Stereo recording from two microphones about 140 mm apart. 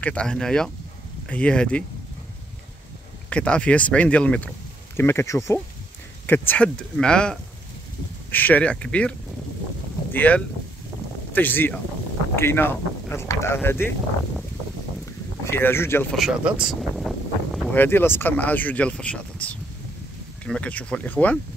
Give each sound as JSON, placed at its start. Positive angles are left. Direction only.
{"t": 0.0, "sound": "speech", "side_deg": 5}
{"t": 3.3, "sound": "speech", "side_deg": 10}
{"t": 10.1, "sound": "speech", "side_deg": 10}
{"t": 15.4, "sound": "speech", "side_deg": 15}
{"t": 16.1, "sound": "speech", "side_deg": -5}
{"t": 17.6, "sound": "speech", "side_deg": 15}